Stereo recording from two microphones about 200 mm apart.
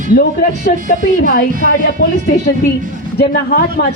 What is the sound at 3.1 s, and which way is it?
Speech, 50° left (ahead or behind).